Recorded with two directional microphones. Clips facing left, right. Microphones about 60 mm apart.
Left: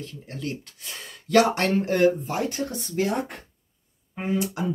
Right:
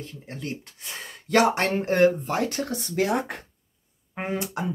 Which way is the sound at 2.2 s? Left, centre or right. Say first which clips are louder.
Right 1 dB; right.